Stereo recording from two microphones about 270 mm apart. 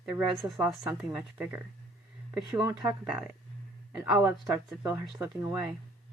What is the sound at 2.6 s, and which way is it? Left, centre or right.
Speech, centre.